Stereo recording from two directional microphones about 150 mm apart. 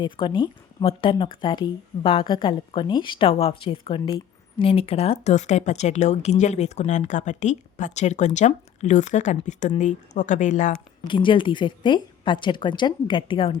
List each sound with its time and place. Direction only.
0.0 s speech: 30° left (ahead or behind); by 10.7 s 55° left (ahead or behind)
11.1 s speech: 35° left (ahead or behind)